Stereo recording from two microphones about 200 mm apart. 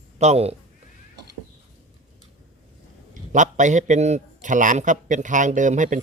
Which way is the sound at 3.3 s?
35° right (ahead or behind).